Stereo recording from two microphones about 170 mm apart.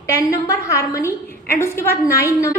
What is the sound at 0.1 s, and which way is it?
A woman's voice, 20° left (ahead or behind).